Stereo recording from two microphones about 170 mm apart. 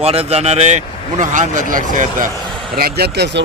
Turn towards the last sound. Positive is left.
turn(degrees=-85)